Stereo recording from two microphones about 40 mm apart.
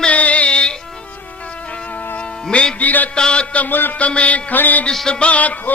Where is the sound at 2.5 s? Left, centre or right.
Left.